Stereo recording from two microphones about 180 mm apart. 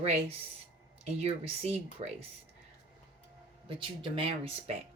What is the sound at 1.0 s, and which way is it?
Speech, 35° right (ahead or behind).